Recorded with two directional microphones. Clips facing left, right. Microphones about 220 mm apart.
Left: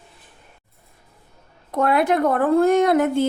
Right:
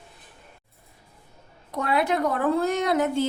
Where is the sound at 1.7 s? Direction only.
55° left (ahead or behind).